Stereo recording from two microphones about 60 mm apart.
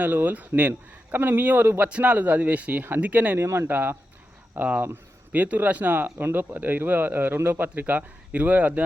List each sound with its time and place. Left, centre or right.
0.0 s speech: right
3.3 s speech: right
3.7 s speech: right